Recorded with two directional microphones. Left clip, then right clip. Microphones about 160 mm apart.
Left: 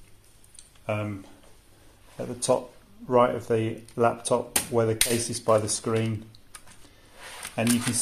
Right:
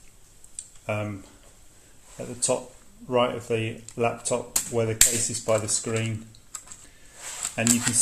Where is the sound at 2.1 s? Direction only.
20° left (ahead or behind).